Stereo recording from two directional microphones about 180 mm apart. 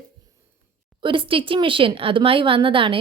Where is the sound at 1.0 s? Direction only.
30° right (ahead or behind).